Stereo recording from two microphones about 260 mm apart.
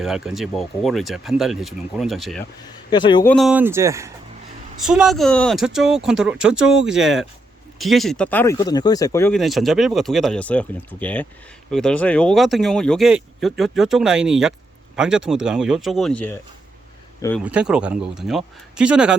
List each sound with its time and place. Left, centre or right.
0.0 s speech: centre
2.9 s speech: centre
3.2 s speech: centre
17.4 s speech: centre